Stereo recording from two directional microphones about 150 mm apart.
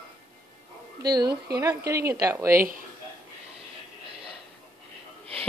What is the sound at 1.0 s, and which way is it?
A woman's voice, 25° right (ahead or behind).